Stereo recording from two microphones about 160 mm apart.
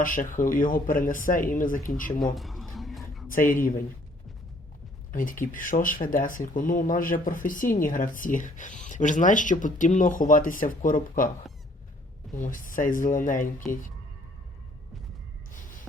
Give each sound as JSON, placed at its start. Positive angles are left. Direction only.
{"t": 0.0, "sound": "speech", "side_deg": 55}
{"t": 2.3, "sound": "a sound", "side_deg": 0}
{"t": 3.2, "sound": "speech", "side_deg": 60}
{"t": 5.1, "sound": "speech", "side_deg": 60}
{"t": 12.3, "sound": "speech", "side_deg": 55}